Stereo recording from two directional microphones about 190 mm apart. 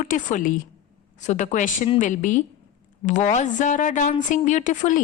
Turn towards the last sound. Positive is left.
turn(degrees=40)  # may be behind; listen again after turning